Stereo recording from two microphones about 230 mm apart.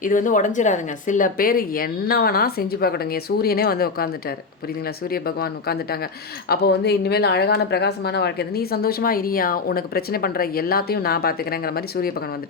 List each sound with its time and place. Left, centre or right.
0.0 s speech: left
5.1 s speech: left